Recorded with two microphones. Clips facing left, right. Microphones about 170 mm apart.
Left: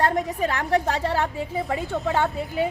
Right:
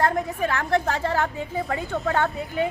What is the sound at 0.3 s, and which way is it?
Speech, 15° left (ahead or behind).